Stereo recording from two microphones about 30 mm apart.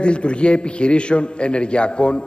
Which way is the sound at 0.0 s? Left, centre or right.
Left.